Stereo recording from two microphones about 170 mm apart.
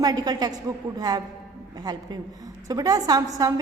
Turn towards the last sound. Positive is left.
turn(degrees=-25)  # may be behind; listen again after turning